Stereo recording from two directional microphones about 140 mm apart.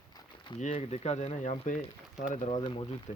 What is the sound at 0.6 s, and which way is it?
Speech, 50° left (ahead or behind).